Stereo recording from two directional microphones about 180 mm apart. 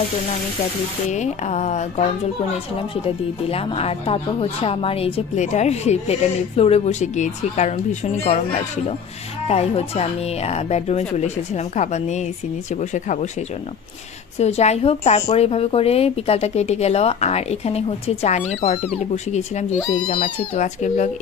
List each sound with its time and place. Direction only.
1.1 s speech: 40° left (ahead or behind)
3.4 s speech: 35° left (ahead or behind)
14.4 s speech: 35° left (ahead or behind)